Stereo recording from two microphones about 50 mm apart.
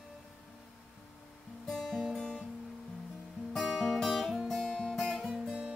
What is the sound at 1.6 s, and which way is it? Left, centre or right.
Guitar, centre.